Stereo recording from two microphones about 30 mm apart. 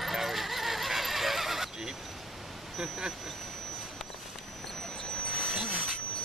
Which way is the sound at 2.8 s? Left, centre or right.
Centre.